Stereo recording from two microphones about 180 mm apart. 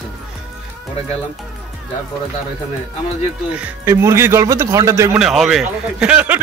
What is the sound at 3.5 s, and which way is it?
Speech, 15° right (ahead or behind).